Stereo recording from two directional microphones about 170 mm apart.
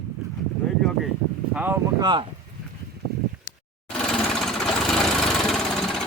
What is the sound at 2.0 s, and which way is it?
Speech, 25° right (ahead or behind).